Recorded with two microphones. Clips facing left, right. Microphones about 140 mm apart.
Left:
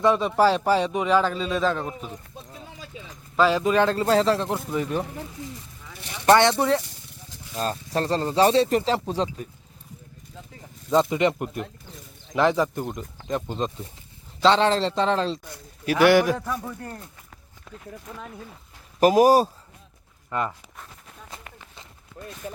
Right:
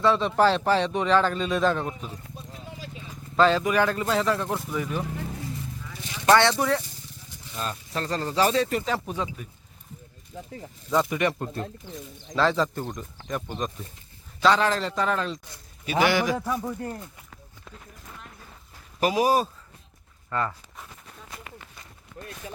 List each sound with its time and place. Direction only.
0.0 s speech: 15° left (ahead or behind); by 2.0 s centre (ahead or behind)
3.3 s speech: 5° left (ahead or behind)
3.6 s speech: 25° left (ahead or behind)
6.3 s speech: 20° left (ahead or behind)
7.5 s speech: 40° left (ahead or behind)
10.9 s speech: 20° left (ahead or behind)
15.4 s speech: 60° left (ahead or behind)
16.3 s speech: 10° right (ahead or behind)
18.9 s speech: 45° left (ahead or behind)
20.3 s speech: 15° left (ahead or behind)